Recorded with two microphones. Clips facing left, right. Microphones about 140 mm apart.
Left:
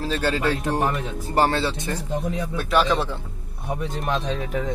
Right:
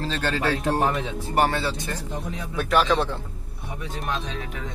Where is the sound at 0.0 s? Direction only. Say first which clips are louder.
Left 2 dB; 10° left (ahead or behind).